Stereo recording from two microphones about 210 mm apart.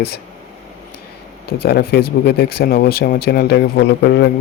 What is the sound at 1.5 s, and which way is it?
Speech, 45° left (ahead or behind).